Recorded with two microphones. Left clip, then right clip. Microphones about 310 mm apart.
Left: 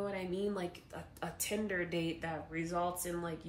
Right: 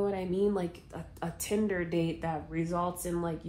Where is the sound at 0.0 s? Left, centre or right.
Centre.